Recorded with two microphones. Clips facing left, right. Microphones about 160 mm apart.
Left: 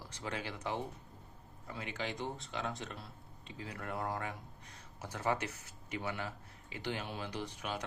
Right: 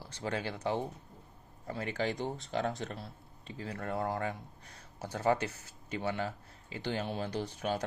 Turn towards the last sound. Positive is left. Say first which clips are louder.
# right 6 dB
turn(degrees=-35)  # may be behind; listen again after turning